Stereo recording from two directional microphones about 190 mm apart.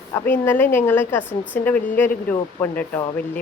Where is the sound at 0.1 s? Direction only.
10° left (ahead or behind).